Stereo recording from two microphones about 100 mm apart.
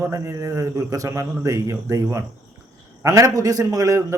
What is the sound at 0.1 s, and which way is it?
A man's voice, 30° right (ahead or behind).